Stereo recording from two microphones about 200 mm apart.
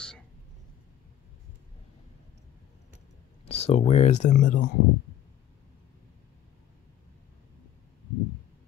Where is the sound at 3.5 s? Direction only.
30° left (ahead or behind).